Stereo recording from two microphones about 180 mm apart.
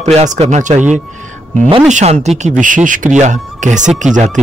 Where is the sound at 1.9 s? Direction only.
40° right (ahead or behind).